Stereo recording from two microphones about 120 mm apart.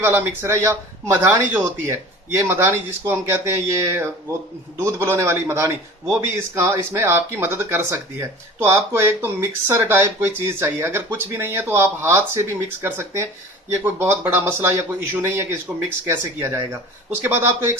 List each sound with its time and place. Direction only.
0.0 s speech: 20° right (ahead or behind)